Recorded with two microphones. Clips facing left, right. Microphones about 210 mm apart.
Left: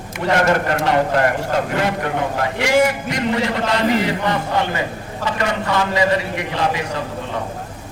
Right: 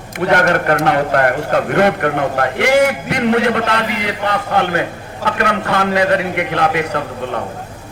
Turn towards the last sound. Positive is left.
turn(degrees=-60)  # may be behind; listen again after turning